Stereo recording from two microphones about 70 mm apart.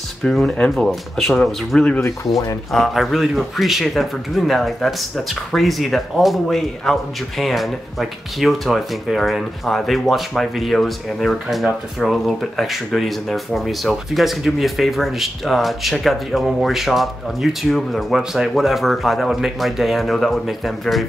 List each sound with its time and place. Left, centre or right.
0.2 s speech: centre